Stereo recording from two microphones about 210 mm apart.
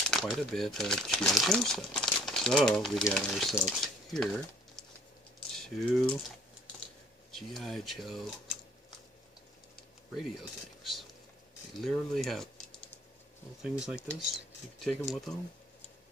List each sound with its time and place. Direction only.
0.1 s speech: centre (ahead or behind)
7.2 s speech: centre (ahead or behind)
10.8 s a sound: centre (ahead or behind)
11.8 s speech: centre (ahead or behind)
13.6 s speech: centre (ahead or behind)